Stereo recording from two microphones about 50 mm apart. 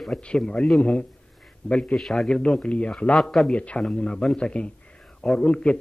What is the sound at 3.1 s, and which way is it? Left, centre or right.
Speech, centre.